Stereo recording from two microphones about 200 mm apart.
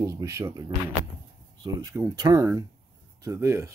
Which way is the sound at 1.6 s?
15° right (ahead or behind).